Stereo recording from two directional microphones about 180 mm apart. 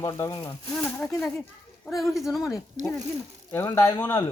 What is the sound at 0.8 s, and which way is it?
Speech, 10° left (ahead or behind).